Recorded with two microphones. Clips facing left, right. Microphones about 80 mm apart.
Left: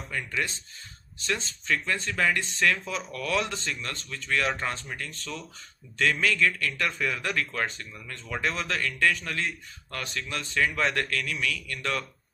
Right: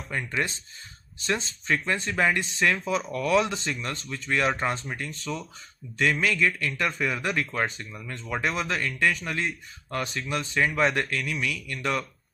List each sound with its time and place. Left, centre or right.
0.1 s a man's voice: right
5.2 s a man's voice: centre